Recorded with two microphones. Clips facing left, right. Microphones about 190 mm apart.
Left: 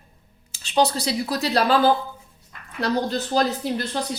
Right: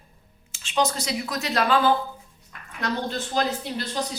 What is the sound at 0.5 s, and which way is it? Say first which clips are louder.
Speech: left 4 dB; 35° left (ahead or behind).